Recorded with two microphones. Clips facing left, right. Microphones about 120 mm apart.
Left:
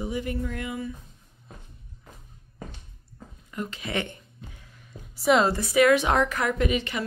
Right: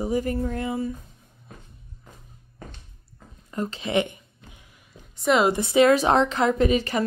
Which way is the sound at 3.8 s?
15° right (ahead or behind).